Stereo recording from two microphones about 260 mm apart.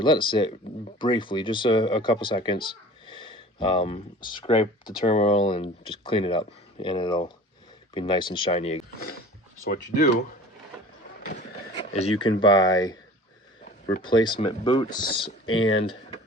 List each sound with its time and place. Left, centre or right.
0.0 s speech: centre
11.7 s a sound: left
12.4 s speech: centre
15.4 s speech: left